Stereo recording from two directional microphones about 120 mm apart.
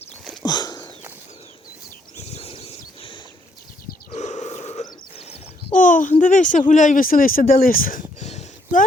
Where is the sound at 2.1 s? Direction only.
65° left (ahead or behind).